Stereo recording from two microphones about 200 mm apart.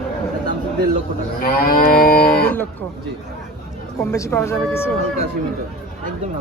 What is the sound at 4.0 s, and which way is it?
Speech, 15° left (ahead or behind).